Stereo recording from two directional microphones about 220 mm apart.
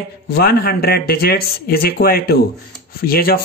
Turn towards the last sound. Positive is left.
turn(degrees=45)  # may be behind; listen again after turning